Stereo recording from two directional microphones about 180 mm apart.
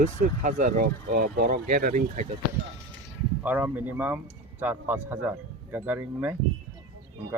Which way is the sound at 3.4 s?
10° right (ahead or behind).